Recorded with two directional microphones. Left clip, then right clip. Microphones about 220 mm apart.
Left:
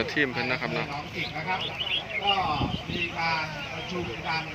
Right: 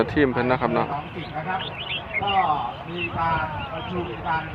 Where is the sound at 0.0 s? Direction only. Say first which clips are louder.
Right 5 dB; 5° left (ahead or behind).